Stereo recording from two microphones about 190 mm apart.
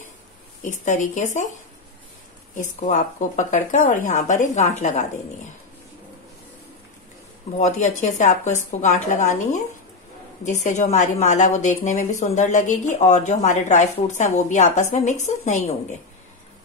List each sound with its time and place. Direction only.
0.6 s speech: 40° left (ahead or behind)
2.5 s speech: 40° left (ahead or behind)
7.5 s speech: 40° left (ahead or behind)